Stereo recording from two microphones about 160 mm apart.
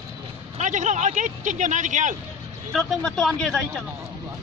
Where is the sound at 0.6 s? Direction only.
50° right (ahead or behind).